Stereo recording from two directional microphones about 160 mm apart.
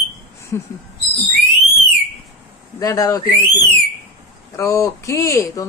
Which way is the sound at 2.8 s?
20° left (ahead or behind).